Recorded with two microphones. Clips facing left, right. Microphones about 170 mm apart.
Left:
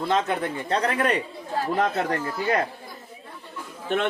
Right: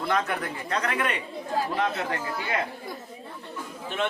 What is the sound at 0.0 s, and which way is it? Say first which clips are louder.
Speech: left 3 dB; 25° left (ahead or behind).